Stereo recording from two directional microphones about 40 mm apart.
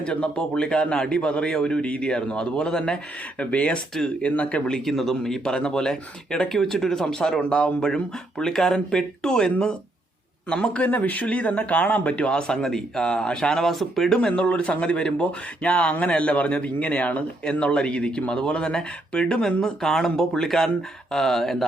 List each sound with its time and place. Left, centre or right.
0.0 s a man's voice: left
3.3 s speech: left
4.7 s speech: centre
10.8 s a man's voice: left
13.5 s speech: centre
14.2 s a man's voice: left
17.4 s a man's voice: left; by 21.6 s centre